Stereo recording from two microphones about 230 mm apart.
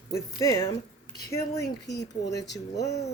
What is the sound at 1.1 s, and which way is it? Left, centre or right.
Speech, left.